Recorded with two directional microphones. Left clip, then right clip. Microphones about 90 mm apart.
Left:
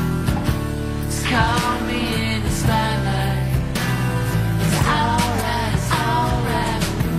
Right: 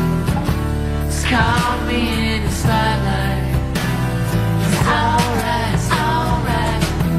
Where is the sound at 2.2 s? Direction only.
10° right (ahead or behind).